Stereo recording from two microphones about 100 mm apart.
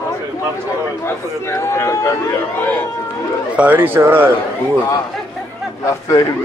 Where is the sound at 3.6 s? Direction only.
20° right (ahead or behind).